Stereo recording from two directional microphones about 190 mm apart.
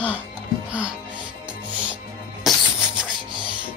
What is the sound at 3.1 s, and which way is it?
Music, 25° right (ahead or behind).